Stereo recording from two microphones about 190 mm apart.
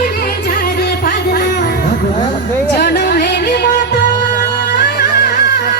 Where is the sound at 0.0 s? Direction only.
45° left (ahead or behind).